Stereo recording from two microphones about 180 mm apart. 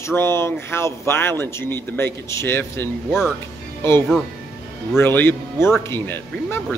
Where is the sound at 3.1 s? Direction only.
5° right (ahead or behind).